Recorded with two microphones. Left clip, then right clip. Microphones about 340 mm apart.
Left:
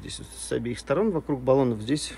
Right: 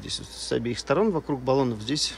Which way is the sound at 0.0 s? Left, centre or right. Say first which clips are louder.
Right 6 dB; centre.